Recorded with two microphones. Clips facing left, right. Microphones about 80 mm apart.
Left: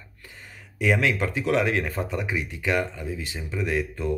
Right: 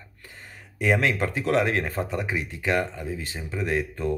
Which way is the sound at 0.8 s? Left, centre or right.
Right.